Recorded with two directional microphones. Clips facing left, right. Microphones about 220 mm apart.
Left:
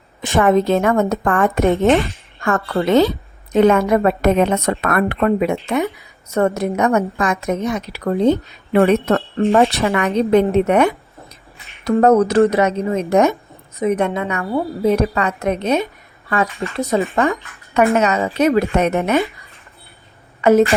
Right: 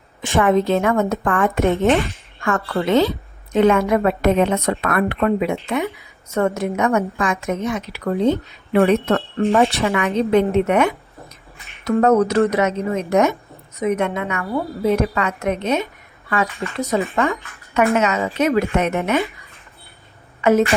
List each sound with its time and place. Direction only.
0.2 s a woman's voice: 45° left (ahead or behind)
20.4 s a woman's voice: 35° left (ahead or behind)